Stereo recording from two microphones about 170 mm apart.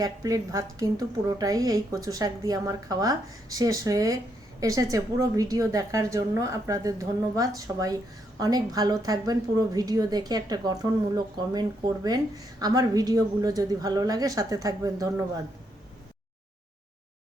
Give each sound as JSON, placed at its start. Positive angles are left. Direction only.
{"t": 0.0, "sound": "a woman's voice", "side_deg": -20}